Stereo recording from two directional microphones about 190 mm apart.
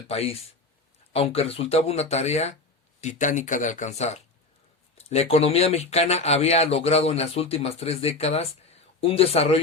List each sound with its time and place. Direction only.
0.1 s speech: 30° left (ahead or behind)